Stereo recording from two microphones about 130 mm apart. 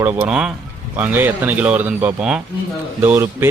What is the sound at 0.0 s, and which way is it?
Speech, 15° right (ahead or behind).